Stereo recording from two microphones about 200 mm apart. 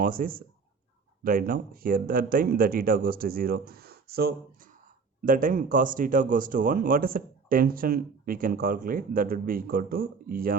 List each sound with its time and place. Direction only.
0.0 s speech: 45° right (ahead or behind)